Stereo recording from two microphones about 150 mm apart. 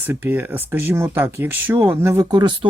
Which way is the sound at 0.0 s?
10° right (ahead or behind).